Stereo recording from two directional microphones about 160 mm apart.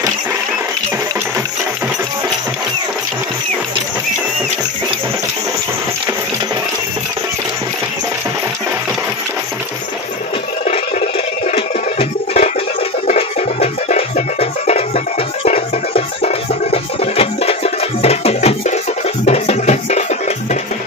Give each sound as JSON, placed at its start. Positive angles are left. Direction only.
{"t": 11.5, "sound": "music", "side_deg": 35}
{"t": 13.0, "sound": "music", "side_deg": 45}
{"t": 16.2, "sound": "music", "side_deg": 40}